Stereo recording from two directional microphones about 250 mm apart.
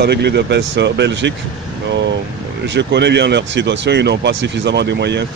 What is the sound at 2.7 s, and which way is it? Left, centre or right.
Speech, right.